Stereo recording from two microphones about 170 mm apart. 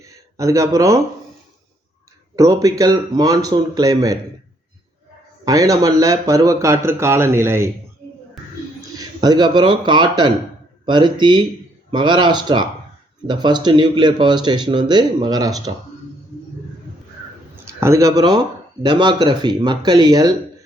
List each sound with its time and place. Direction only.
0.3 s speech: 20° right (ahead or behind)
2.3 s speech: 20° right (ahead or behind)
5.5 s speech: 20° right (ahead or behind)
9.0 s a man's voice: 25° right (ahead or behind)
17.7 s speech: 15° right (ahead or behind)